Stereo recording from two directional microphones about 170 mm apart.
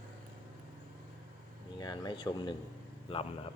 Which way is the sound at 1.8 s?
25° left (ahead or behind).